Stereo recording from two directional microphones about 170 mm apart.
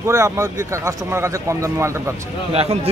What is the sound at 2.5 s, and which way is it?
Speech, 35° right (ahead or behind).